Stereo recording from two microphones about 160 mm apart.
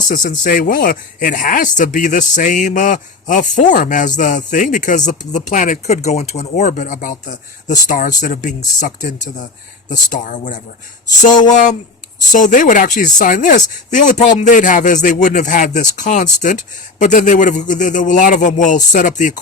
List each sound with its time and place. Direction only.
0.1 s speech: 55° left (ahead or behind)